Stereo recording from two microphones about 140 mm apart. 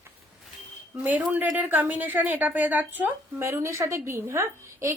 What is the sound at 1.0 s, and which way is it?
A woman's voice, 10° right (ahead or behind).